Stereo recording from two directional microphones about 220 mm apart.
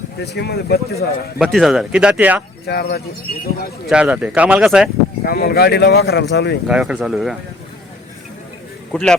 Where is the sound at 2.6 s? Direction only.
45° left (ahead or behind).